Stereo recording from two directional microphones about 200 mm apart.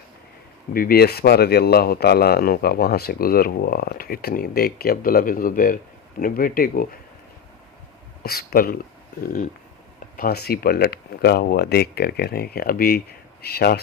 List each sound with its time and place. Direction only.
0.7 s speech: 45° left (ahead or behind)
8.2 s speech: 50° left (ahead or behind)